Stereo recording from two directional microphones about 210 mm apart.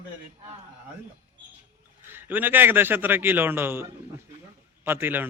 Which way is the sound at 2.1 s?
10° right (ahead or behind).